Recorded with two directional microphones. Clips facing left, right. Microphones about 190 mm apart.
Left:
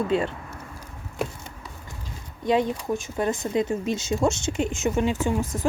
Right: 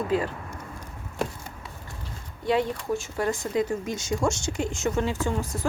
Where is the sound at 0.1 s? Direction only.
25° left (ahead or behind).